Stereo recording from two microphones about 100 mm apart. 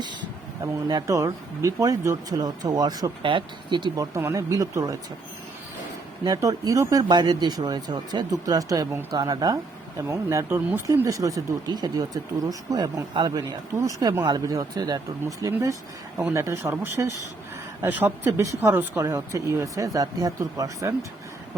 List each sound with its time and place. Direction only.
0.6 s speech: 40° right (ahead or behind)
3.2 s speech: 55° right (ahead or behind)
3.9 s speech: 35° right (ahead or behind)
6.2 s speech: 35° right (ahead or behind)
10.5 s speech: 20° right (ahead or behind)
10.8 s speech: 30° right (ahead or behind)
16.1 s speech: 30° right (ahead or behind)
17.8 s speech: 20° right (ahead or behind)
18.3 s speech: 30° right (ahead or behind)